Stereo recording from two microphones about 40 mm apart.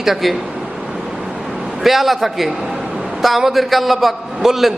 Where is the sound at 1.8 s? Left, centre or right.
Centre.